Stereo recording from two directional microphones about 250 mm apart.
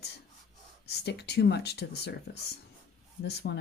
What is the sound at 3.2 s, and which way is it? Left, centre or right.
Speech, left.